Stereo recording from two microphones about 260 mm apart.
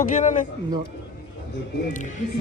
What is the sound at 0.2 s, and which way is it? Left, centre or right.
Speech, left.